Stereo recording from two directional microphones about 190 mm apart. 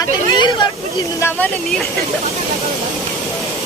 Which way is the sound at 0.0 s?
25° left (ahead or behind).